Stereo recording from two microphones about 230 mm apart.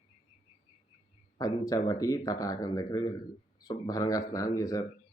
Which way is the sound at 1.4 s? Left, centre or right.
Centre.